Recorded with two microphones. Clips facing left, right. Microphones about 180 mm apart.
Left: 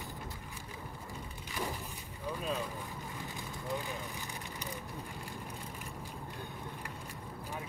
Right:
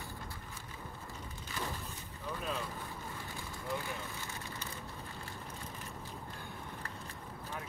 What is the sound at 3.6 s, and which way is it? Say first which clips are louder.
Vehicle: left 1 dB; 15° left (ahead or behind).